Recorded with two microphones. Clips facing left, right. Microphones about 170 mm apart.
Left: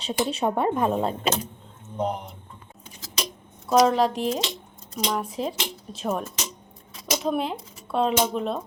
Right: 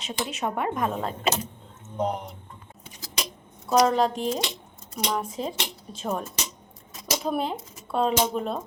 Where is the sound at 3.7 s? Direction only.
Centre (ahead or behind).